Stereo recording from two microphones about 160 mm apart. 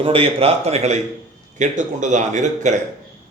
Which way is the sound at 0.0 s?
35° right (ahead or behind).